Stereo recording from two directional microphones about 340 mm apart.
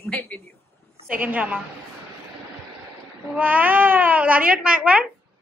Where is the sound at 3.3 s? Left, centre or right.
Centre.